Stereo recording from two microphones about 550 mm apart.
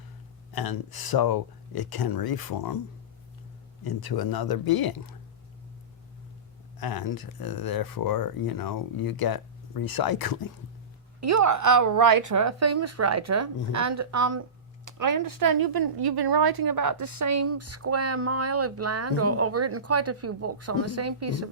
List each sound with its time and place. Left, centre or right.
0.5 s speech: left
3.8 s speech: left
6.7 s speech: left
11.2 s speech: right